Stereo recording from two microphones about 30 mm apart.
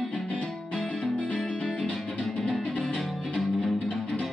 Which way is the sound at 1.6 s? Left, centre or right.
Centre.